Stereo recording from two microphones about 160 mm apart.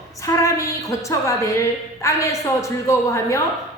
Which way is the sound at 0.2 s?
20° left (ahead or behind).